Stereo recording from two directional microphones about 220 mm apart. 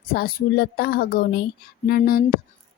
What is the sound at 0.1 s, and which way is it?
Speech, 45° left (ahead or behind).